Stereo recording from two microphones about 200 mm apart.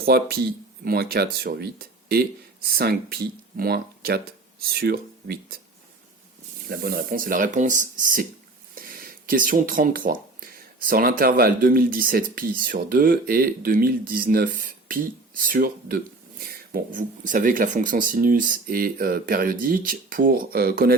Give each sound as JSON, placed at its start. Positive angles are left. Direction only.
{"t": 0.0, "sound": "speech", "side_deg": -50}
{"t": 6.7, "sound": "speech", "side_deg": -50}